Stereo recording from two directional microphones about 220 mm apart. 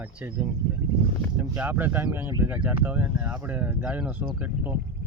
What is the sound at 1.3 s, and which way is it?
Speech, 5° right (ahead or behind).